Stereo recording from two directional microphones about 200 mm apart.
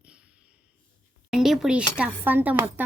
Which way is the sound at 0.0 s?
5° right (ahead or behind).